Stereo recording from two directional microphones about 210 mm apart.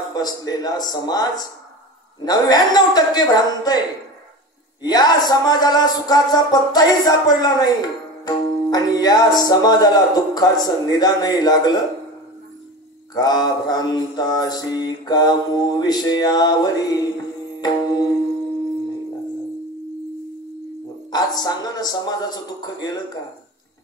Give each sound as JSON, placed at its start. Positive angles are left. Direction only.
{"t": 0.1, "sound": "music", "side_deg": 20}
{"t": 4.8, "sound": "music", "side_deg": 20}
{"t": 13.1, "sound": "music", "side_deg": 20}
{"t": 21.1, "sound": "music", "side_deg": 20}